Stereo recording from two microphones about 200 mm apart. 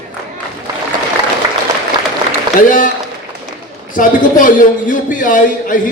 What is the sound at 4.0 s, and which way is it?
A man's voice, 40° left (ahead or behind).